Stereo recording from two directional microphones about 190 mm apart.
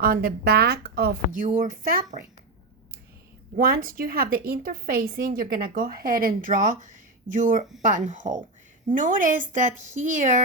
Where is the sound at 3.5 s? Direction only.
50° right (ahead or behind).